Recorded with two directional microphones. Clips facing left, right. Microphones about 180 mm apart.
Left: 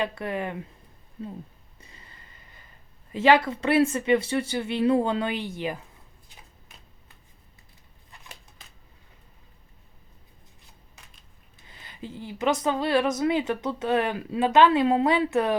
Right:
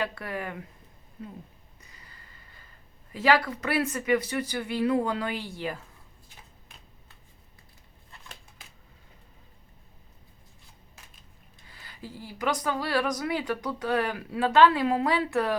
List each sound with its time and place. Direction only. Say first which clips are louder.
0.0 s speech: left 4 dB; 20° left (ahead or behind)
1.8 s a sound: left 4 dB; 25° left (ahead or behind)
3.1 s speech: left 4 dB; 25° left (ahead or behind)
11.6 s speech: left 4 dB; 20° left (ahead or behind)